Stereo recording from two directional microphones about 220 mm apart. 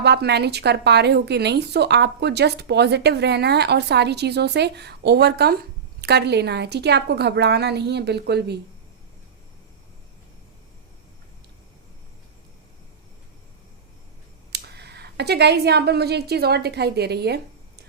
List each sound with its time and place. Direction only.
0.0 s speech: 50° right (ahead or behind)
14.5 s a woman's voice: 50° right (ahead or behind)